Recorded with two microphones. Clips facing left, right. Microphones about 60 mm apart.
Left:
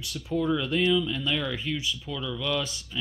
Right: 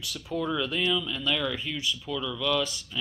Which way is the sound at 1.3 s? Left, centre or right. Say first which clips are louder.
Even; centre.